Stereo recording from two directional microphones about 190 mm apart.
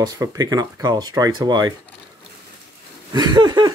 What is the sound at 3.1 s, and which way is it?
Speech, 20° right (ahead or behind).